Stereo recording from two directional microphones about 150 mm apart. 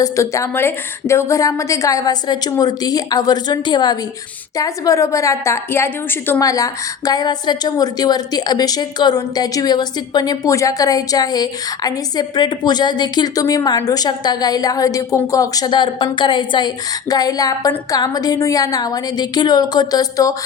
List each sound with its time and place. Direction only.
0.0 s a woman's voice: 20° left (ahead or behind)